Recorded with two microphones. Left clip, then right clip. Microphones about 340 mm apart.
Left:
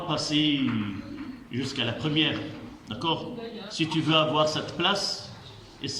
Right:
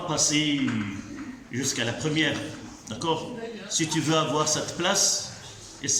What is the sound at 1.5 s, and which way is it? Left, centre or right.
A man's voice, centre.